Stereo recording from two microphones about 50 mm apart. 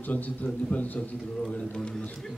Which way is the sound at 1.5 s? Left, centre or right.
Centre.